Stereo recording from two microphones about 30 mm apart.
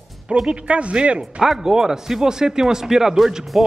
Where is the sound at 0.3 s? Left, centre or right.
Right.